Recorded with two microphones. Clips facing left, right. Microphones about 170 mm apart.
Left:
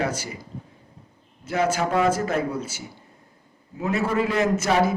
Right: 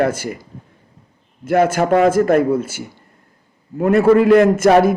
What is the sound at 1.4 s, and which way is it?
A man's voice, 55° right (ahead or behind).